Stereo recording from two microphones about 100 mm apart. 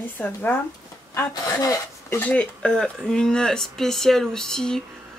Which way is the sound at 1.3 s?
35° left (ahead or behind).